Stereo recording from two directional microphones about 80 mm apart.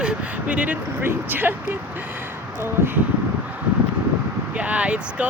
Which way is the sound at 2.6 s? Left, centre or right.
Right.